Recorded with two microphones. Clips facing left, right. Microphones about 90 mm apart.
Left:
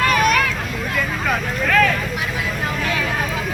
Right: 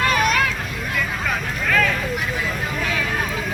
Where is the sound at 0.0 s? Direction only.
25° right (ahead or behind).